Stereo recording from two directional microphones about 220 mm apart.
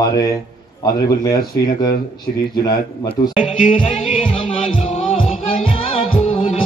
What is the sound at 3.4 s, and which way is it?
Music, 30° left (ahead or behind).